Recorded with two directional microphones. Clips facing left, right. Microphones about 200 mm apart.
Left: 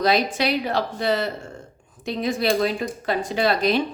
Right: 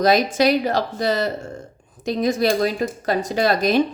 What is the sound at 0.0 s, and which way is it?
A woman's voice, 45° right (ahead or behind).